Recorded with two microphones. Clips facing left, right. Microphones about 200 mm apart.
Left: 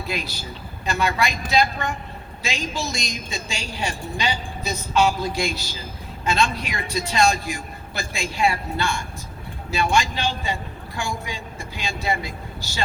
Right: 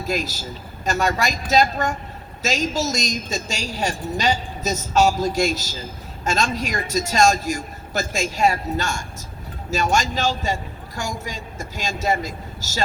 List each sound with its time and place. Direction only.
0.0 s a man's voice: 45° right (ahead or behind)